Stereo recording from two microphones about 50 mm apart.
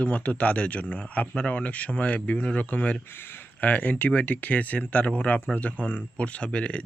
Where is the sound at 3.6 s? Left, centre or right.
Left.